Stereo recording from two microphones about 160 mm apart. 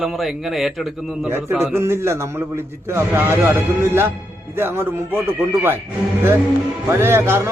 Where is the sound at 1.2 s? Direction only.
15° right (ahead or behind).